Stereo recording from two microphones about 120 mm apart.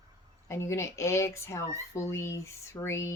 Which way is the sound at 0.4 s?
25° left (ahead or behind).